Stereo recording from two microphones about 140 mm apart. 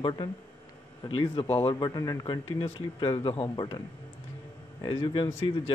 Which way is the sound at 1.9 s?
30° left (ahead or behind).